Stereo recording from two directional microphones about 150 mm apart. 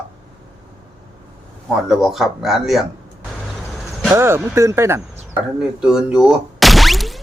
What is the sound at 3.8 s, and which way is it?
Vehicle, centre (ahead or behind).